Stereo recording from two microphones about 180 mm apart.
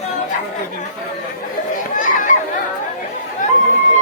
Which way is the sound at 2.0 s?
50° left (ahead or behind).